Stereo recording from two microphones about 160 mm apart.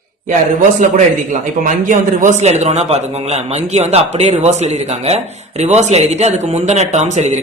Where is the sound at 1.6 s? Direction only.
55° right (ahead or behind).